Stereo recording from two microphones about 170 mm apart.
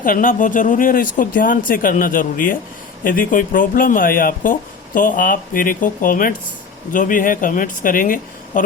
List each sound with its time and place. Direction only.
0.0 s speech: 55° left (ahead or behind)